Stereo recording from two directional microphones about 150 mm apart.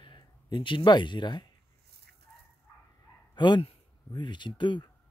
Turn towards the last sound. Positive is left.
turn(degrees=30)  # may be behind; listen again after turning